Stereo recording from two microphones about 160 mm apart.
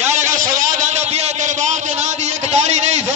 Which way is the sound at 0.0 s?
50° right (ahead or behind).